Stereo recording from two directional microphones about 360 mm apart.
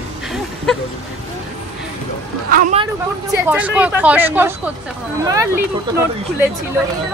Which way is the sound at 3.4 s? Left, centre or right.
Centre.